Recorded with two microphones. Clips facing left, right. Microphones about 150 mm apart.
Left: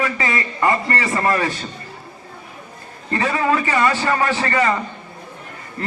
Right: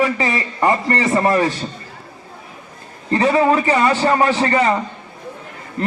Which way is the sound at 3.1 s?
30° right (ahead or behind).